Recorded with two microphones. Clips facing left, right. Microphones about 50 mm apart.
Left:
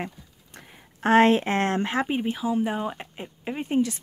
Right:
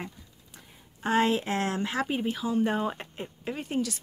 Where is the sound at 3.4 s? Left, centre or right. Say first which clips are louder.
Left 6 dB; left.